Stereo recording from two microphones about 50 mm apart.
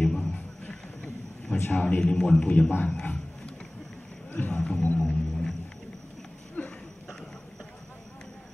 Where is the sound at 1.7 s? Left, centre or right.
Left.